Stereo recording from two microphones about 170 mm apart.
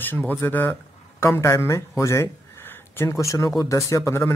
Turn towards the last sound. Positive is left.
turn(degrees=15)  # may be behind; listen again after turning